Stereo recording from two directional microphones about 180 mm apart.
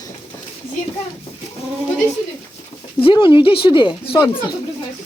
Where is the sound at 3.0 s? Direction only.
25° left (ahead or behind).